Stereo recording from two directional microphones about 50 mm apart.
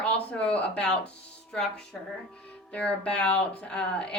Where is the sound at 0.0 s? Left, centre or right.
Left.